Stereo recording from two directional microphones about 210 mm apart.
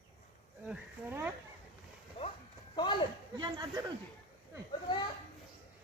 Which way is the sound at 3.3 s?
20° right (ahead or behind).